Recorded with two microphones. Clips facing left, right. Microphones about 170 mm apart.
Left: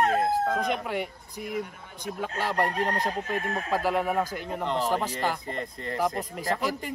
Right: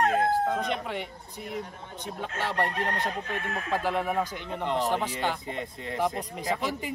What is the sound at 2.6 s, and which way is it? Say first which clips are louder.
Speech: left 2 dB; 35° left (ahead or behind).